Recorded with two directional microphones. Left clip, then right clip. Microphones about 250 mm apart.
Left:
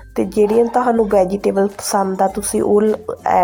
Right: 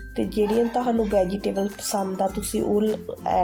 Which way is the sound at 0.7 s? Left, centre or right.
Centre.